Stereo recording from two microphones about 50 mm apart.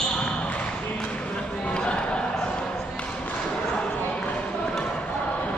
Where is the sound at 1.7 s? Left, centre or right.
Centre.